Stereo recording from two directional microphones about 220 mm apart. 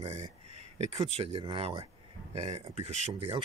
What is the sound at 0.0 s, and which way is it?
Speech, 30° right (ahead or behind).